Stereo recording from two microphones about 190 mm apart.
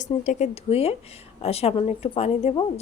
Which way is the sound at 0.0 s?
40° left (ahead or behind).